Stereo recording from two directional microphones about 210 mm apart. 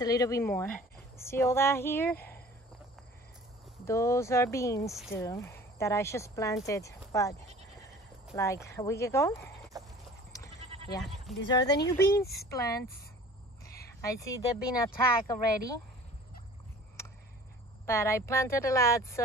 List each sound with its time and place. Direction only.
0.0 s speech: 15° left (ahead or behind)
3.8 s speech: 15° left (ahead or behind)
9.7 s a sound: 15° right (ahead or behind)
10.6 s goat: 30° right (ahead or behind)
11.0 s speech: centre (ahead or behind)
11.4 s speech: 20° left (ahead or behind)
17.8 s speech: 15° left (ahead or behind)